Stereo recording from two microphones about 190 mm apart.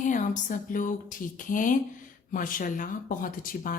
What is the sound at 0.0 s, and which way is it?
A woman's voice, 40° left (ahead or behind).